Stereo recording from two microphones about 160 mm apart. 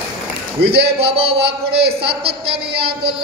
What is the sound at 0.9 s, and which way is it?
A man's voice, 35° right (ahead or behind).